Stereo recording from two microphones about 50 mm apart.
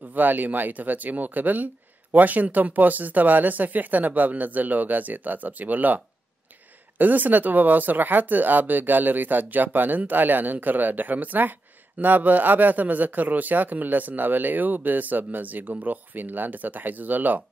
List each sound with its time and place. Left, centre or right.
0.1 s a man's voice: right